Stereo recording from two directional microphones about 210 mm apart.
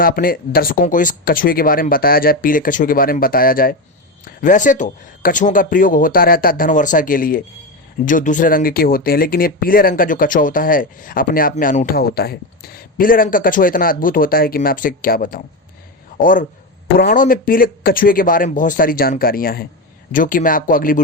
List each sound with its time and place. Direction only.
0.0 s speech: 45° left (ahead or behind)